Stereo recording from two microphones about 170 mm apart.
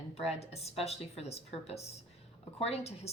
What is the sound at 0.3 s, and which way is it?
A woman's voice, 40° left (ahead or behind).